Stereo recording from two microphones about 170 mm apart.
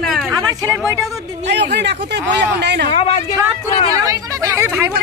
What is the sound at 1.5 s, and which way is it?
Speech, 85° right.